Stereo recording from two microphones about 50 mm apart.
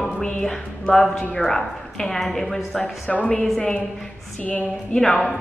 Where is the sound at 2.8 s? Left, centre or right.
Left.